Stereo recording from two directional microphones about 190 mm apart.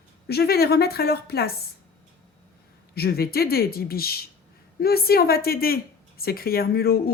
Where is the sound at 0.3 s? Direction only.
55° left (ahead or behind).